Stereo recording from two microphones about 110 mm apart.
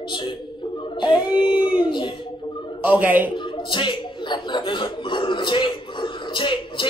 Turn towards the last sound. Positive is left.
turn(degrees=50)  # may be behind; listen again after turning